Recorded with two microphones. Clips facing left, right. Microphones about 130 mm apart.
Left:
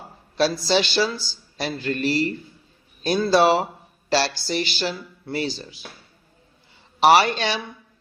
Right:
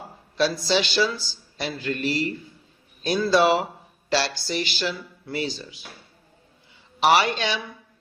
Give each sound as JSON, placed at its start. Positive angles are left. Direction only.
{"t": 0.3, "sound": "a man's voice", "side_deg": 35}
{"t": 7.0, "sound": "a man's voice", "side_deg": 35}